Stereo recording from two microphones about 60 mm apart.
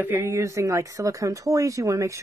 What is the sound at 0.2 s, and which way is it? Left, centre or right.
Speech, right.